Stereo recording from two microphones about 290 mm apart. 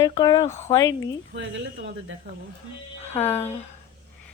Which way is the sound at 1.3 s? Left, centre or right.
Right.